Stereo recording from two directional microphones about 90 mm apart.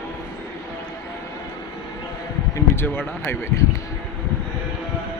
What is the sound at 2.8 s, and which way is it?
Speech, 25° left (ahead or behind).